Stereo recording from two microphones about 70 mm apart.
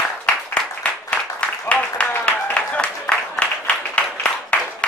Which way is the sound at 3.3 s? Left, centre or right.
Centre.